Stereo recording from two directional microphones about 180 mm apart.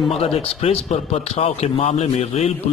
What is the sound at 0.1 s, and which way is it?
Speech, 35° left (ahead or behind).